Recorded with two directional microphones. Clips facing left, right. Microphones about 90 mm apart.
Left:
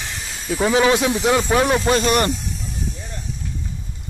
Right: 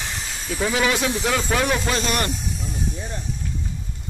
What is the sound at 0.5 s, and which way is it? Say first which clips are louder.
Speech: left 6 dB; 25° left (ahead or behind).